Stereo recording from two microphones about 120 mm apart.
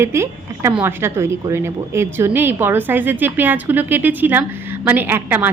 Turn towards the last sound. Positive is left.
turn(degrees=-15)  # may be behind; listen again after turning